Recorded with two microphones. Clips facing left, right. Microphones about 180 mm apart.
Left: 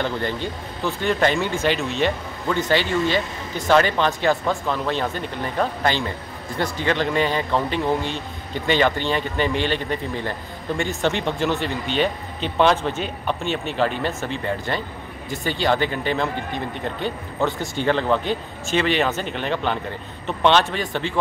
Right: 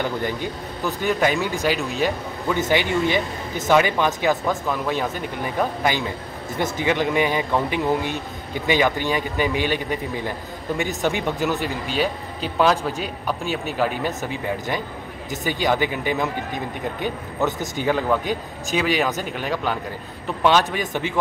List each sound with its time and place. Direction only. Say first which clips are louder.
0.0 s a man's voice: even; 10° right (ahead or behind)